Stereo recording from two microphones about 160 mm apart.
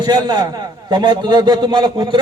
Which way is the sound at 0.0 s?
25° right (ahead or behind).